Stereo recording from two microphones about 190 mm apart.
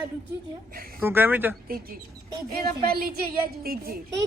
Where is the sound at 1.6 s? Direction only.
50° right (ahead or behind).